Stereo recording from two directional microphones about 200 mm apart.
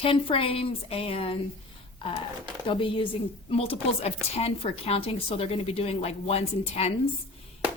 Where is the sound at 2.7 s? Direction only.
25° left (ahead or behind).